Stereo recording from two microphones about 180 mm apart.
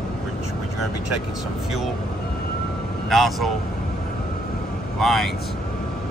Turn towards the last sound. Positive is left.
turn(degrees=0)  # may be behind; listen again after turning